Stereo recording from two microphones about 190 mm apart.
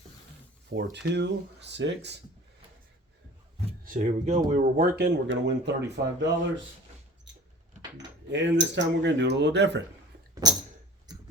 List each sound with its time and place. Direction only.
0.7 s speech: 65° right (ahead or behind)
3.8 s speech: 45° right (ahead or behind)
4.9 s speech: 60° right (ahead or behind)
7.3 s keys jangling: 70° right (ahead or behind)
8.3 s speech: 70° right (ahead or behind)
10.4 s a sound: 20° right (ahead or behind)